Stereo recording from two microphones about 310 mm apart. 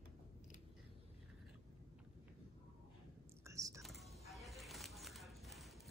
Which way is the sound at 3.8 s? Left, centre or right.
Centre.